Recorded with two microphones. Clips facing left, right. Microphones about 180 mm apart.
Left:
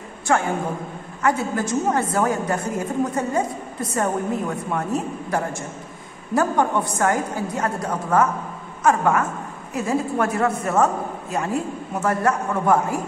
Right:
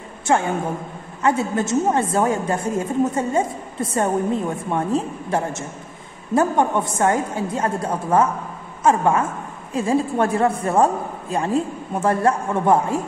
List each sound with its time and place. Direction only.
0.3 s a woman's voice: 20° right (ahead or behind)